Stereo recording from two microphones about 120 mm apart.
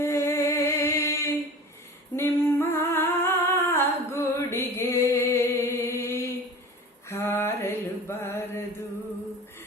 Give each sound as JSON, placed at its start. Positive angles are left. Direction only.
{"t": 0.0, "sound": "music", "side_deg": 25}
{"t": 2.1, "sound": "humming", "side_deg": 20}
{"t": 7.1, "sound": "mantra", "side_deg": 20}